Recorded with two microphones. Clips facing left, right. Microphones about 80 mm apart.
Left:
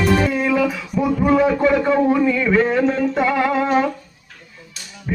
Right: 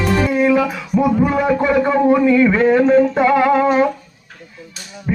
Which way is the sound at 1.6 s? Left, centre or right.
Centre.